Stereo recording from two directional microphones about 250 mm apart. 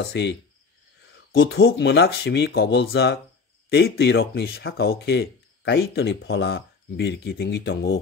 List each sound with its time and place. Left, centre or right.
0.0 s cricket: left
1.1 s speech: left